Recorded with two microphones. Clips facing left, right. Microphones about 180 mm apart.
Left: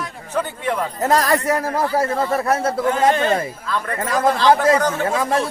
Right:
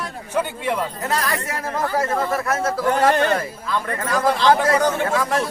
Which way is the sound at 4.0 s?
25° left (ahead or behind).